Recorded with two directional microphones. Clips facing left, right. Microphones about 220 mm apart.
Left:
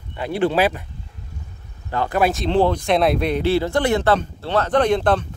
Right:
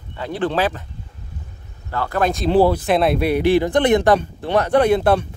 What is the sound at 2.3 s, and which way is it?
Speech, 5° right (ahead or behind).